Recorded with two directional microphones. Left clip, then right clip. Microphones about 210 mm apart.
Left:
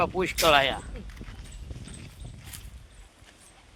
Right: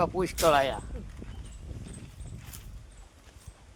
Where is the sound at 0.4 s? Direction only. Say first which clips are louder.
Left 2 dB; 15° left (ahead or behind).